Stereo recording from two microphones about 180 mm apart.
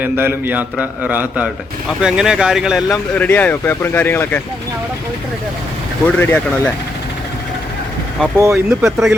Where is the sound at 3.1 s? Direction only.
10° left (ahead or behind).